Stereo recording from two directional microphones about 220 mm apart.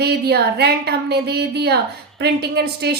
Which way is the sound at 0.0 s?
45° right (ahead or behind).